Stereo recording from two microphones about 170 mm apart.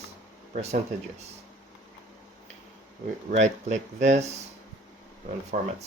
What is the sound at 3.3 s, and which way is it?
Speech, 45° right (ahead or behind).